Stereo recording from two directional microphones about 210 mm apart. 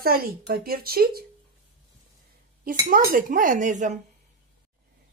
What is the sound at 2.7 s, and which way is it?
Speech, 40° right (ahead or behind).